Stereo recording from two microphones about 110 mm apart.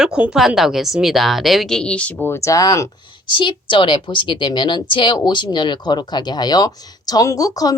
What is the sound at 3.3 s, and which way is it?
A woman's voice, 45° left (ahead or behind).